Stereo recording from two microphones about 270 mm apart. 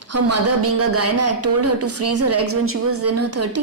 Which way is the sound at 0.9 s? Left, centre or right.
Right.